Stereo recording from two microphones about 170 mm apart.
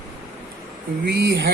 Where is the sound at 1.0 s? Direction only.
75° right (ahead or behind).